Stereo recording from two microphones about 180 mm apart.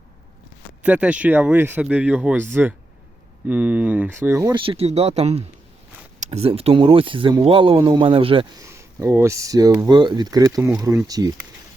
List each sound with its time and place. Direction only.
0.8 s speech: 5° right (ahead or behind)
4.5 s speech: 30° right (ahead or behind)
8.6 s speech: 15° right (ahead or behind)